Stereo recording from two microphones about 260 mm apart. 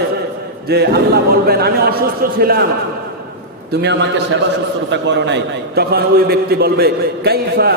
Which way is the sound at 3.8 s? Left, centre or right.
Right.